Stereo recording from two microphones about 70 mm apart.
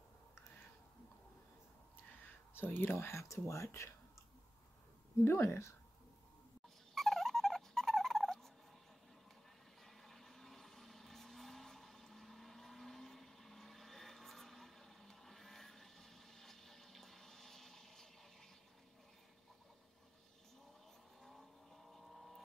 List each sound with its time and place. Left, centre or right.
2.5 s speech: left
5.2 s speech: left
7.0 s a sound: centre
9.8 s vehicle: centre
21.2 s vehicle: centre